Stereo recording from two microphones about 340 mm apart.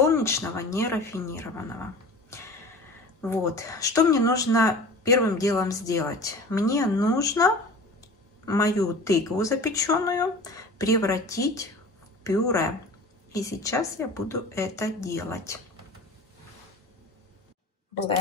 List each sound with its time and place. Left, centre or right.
0.0 s speech: centre
3.2 s speech: centre